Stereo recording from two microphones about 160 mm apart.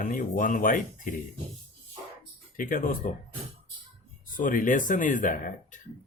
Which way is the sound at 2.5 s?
60° left (ahead or behind).